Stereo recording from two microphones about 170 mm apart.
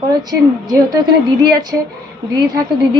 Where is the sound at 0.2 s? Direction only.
25° right (ahead or behind).